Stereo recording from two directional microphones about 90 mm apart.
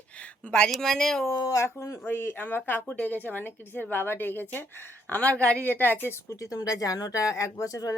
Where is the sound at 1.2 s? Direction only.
40° left (ahead or behind).